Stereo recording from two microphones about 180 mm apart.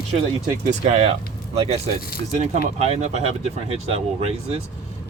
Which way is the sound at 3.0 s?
35° right (ahead or behind).